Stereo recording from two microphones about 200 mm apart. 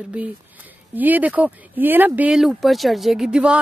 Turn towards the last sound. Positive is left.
turn(degrees=-5)  # may be behind; listen again after turning